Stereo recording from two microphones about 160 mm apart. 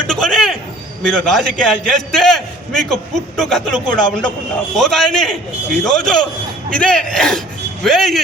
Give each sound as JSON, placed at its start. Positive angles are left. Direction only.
{"t": 0.1, "sound": "bird", "side_deg": 0}
{"t": 1.0, "sound": "a man's voice", "side_deg": 0}